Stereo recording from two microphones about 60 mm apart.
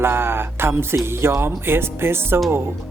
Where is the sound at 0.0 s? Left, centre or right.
Right.